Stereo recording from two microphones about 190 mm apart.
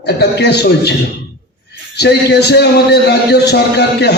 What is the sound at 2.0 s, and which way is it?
A man's voice, 60° left (ahead or behind).